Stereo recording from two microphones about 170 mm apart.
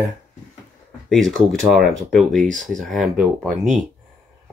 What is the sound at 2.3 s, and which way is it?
Speech, 50° right (ahead or behind).